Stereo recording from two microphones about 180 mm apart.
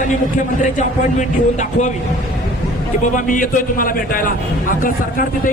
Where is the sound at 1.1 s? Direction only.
40° left (ahead or behind).